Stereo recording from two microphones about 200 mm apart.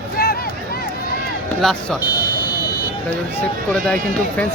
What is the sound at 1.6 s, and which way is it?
Speech, centre (ahead or behind).